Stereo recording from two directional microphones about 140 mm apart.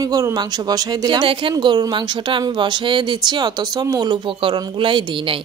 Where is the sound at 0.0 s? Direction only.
25° right (ahead or behind).